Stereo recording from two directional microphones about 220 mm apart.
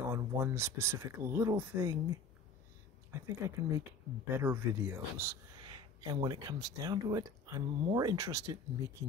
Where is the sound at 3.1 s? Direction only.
15° right (ahead or behind).